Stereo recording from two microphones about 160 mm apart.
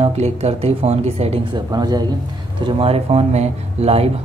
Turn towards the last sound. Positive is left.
turn(degrees=-40)  # may be behind; listen again after turning